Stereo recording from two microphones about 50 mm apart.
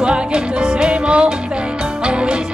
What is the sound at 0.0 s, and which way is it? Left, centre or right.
Music, centre.